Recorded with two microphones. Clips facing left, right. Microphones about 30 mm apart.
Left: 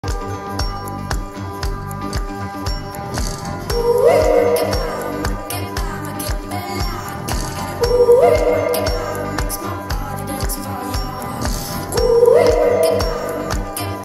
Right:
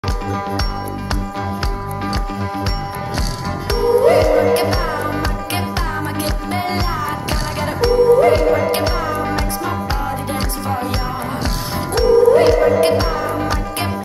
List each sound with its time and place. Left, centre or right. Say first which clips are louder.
3.6 s music: even; right